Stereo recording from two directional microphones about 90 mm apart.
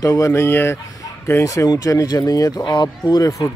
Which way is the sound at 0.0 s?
35° left (ahead or behind).